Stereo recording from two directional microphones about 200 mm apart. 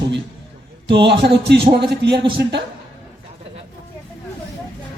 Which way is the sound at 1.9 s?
60° right (ahead or behind).